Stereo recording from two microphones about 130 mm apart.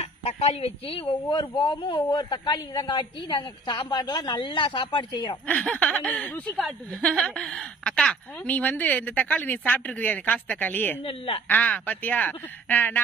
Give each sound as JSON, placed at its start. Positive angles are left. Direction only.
{"t": 0.0, "sound": "a man's voice", "side_deg": 55}
{"t": 5.5, "sound": "speech", "side_deg": 10}
{"t": 11.1, "sound": "speech", "side_deg": 45}
{"t": 11.4, "sound": "speech", "side_deg": 10}